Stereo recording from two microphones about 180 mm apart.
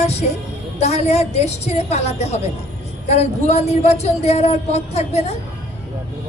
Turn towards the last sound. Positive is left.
turn(degrees=35)  # may be behind; listen again after turning